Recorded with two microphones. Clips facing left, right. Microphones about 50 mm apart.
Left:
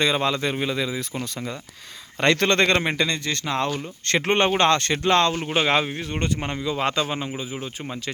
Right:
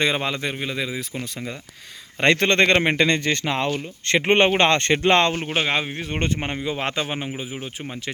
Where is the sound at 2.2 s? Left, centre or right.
Right.